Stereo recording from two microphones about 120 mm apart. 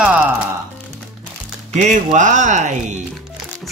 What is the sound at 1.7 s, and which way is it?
Speech, 80° right.